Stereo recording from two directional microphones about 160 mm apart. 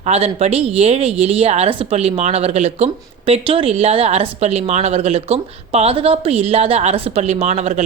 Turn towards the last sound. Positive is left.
turn(degrees=-45)  # may be behind; listen again after turning